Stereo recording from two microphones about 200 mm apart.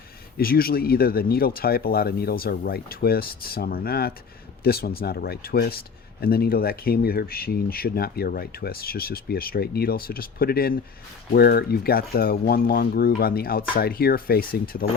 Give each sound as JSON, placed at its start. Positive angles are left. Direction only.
{"t": 0.3, "sound": "speech", "side_deg": 50}